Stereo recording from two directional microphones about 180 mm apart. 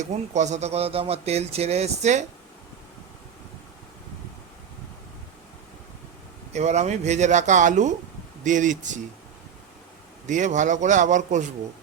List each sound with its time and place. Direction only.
0.0 s speech: 40° right (ahead or behind)
6.5 s a man's voice: 40° right (ahead or behind)
10.2 s a man's voice: 45° right (ahead or behind)